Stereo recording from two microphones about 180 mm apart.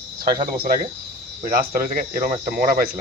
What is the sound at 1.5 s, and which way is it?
Speech, 55° right (ahead or behind).